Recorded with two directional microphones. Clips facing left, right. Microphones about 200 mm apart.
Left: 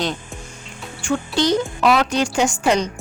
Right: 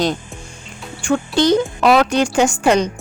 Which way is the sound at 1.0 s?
50° right (ahead or behind).